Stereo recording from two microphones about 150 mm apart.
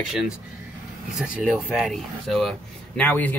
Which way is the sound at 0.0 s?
5° right (ahead or behind).